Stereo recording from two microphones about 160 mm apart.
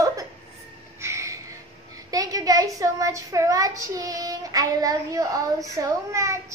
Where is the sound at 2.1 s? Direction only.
20° right (ahead or behind).